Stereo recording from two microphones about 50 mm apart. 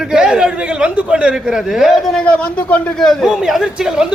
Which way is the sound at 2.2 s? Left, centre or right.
Left.